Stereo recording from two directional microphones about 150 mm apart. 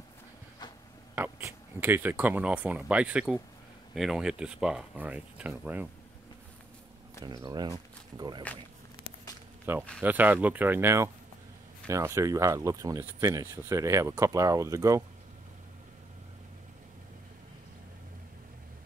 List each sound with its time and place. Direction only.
1.1 s speech: 15° right (ahead or behind)
7.2 s speech: 25° right (ahead or behind)
9.7 s speech: 15° right (ahead or behind)